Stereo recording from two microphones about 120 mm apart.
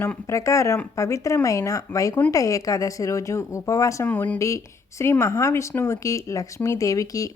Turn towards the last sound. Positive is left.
turn(degrees=30)  # may be behind; listen again after turning